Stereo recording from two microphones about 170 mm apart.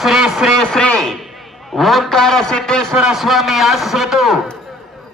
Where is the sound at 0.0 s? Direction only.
Centre (ahead or behind).